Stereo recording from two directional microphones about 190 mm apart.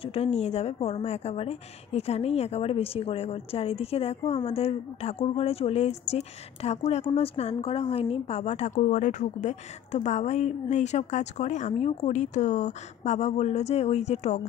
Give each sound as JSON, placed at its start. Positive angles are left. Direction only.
{"t": 0.0, "sound": "a woman's voice", "side_deg": 30}